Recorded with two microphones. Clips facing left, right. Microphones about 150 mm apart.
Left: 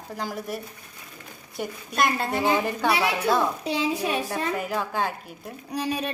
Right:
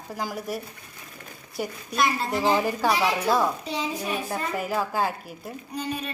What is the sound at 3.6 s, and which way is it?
Speech, 70° left (ahead or behind).